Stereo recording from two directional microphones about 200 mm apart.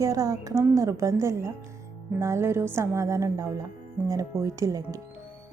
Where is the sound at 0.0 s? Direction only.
15° right (ahead or behind).